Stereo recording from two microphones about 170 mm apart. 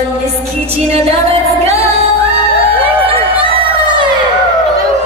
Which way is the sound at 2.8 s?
35° right (ahead or behind).